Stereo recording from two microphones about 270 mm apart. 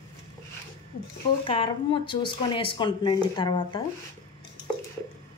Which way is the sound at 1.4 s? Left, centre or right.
Centre.